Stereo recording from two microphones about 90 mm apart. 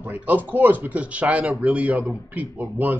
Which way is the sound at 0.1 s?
20° right (ahead or behind).